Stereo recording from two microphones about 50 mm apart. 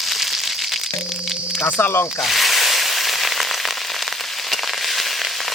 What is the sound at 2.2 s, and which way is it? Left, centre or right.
Frying, centre.